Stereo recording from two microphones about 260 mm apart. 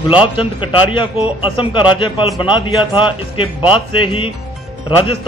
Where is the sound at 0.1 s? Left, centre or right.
Centre.